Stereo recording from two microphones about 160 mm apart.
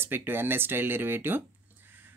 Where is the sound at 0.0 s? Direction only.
15° right (ahead or behind).